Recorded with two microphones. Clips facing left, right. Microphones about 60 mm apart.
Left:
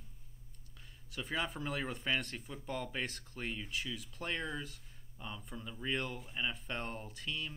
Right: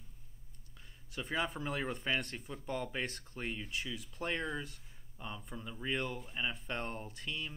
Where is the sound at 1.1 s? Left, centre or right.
Centre.